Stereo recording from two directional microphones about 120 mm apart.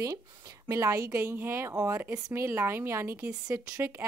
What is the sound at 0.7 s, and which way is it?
Speech, 25° right (ahead or behind).